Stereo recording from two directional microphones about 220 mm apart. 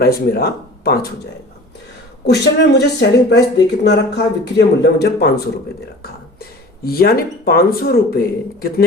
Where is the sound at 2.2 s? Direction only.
50° left (ahead or behind).